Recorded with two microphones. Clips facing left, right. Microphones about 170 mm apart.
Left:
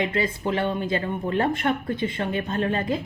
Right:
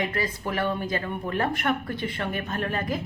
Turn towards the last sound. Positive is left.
turn(degrees=25)  # may be behind; listen again after turning